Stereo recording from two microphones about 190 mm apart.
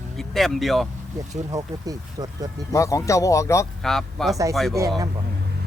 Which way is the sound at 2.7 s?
15° left (ahead or behind).